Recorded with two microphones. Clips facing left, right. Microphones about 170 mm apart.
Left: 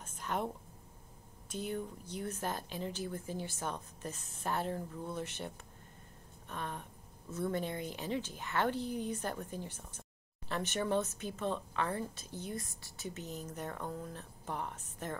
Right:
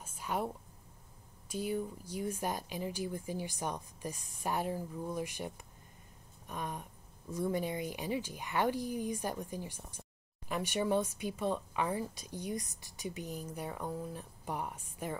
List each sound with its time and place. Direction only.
0.0 s a sound: 10° right (ahead or behind)
1.5 s speech: 10° right (ahead or behind)
6.5 s speech: 10° right (ahead or behind)